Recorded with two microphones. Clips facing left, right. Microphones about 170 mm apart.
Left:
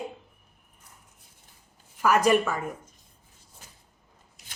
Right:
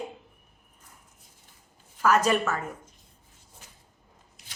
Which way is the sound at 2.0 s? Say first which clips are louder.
Left 2 dB; 15° left (ahead or behind).